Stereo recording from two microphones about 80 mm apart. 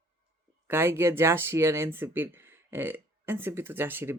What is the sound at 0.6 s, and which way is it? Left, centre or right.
Speech, right.